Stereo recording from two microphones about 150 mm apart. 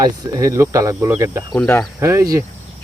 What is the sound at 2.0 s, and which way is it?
Speech, 20° right (ahead or behind).